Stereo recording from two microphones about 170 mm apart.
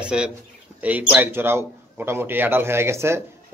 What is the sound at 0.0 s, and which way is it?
A man's voice, 5° right (ahead or behind).